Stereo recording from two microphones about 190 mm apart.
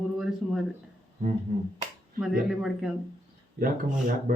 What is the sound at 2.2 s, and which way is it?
Music, 5° right (ahead or behind).